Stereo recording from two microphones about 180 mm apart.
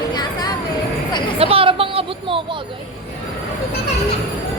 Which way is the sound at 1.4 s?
30° right (ahead or behind).